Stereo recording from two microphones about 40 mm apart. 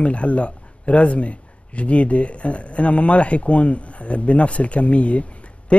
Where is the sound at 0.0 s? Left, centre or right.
Left.